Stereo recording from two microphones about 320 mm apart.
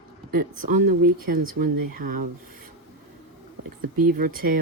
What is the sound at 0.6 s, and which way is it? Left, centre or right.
Speech, right.